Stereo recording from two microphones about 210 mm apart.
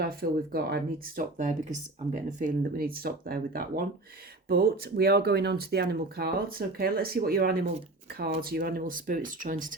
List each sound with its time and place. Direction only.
0.0 s speech: 45° right (ahead or behind)